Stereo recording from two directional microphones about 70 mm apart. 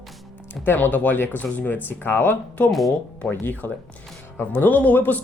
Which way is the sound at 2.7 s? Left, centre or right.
Centre.